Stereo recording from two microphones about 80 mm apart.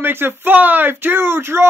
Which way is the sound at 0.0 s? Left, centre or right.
Right.